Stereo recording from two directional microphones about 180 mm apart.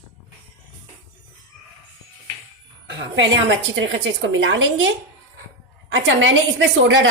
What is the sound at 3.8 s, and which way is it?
A woman's voice, 90° right.